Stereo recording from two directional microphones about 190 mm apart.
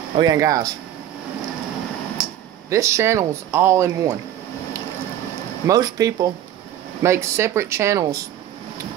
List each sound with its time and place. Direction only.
0.1 s speech: 20° right (ahead or behind)
2.7 s speech: 15° right (ahead or behind)
5.7 s speech: 20° right (ahead or behind)